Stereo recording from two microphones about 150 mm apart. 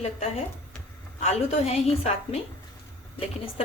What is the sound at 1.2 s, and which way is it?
A woman's voice, 45° left (ahead or behind).